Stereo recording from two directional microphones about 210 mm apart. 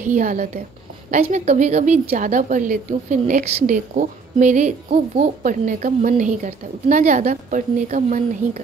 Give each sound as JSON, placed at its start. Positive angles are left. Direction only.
{"t": 0.0, "sound": "a woman's voice", "side_deg": -35}